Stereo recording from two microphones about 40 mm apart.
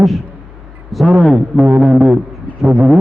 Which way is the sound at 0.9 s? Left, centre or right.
Centre.